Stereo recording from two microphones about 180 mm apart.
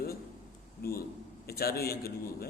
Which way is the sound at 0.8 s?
55° left (ahead or behind).